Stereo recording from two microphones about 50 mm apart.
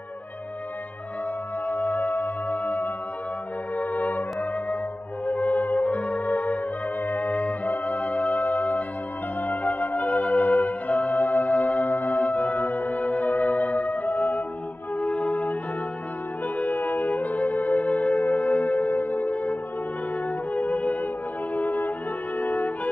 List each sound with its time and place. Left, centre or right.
1.7 s music: left
3.7 s brass instrument: left
5.2 s music: left
16.5 s music: left
22.4 s brass instrument: left